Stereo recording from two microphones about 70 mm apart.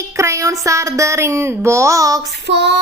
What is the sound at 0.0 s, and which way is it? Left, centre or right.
Speech, right.